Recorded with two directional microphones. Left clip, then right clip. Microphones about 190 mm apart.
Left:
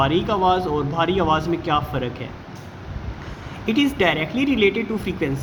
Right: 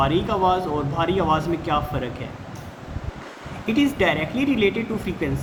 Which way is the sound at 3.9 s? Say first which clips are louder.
Left 2 dB; 35° left (ahead or behind).